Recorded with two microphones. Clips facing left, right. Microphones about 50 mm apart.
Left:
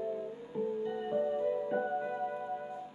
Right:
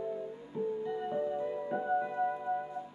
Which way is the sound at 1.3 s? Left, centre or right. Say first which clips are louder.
Left 3 dB; centre.